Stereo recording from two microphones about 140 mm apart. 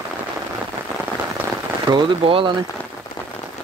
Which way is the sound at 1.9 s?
35° right (ahead or behind).